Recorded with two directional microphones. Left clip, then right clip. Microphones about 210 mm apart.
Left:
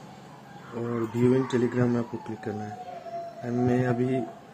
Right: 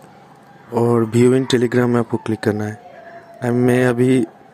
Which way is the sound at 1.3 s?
45° right (ahead or behind).